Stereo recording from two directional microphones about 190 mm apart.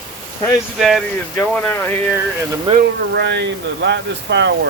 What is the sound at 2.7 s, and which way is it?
Speech, 30° right (ahead or behind).